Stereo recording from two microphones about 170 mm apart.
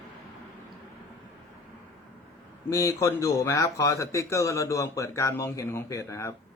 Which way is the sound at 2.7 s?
20° left (ahead or behind).